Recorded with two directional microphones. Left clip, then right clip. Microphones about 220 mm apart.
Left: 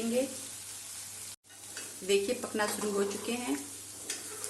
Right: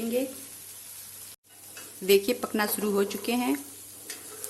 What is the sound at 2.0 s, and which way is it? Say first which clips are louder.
Speech: right 7 dB; 45° right (ahead or behind).